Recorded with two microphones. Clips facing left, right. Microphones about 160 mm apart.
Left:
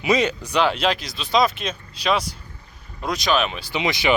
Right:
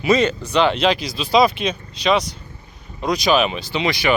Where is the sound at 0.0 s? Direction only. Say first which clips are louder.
Right 3 dB; 15° left (ahead or behind); by 3.6 s 5° right (ahead or behind).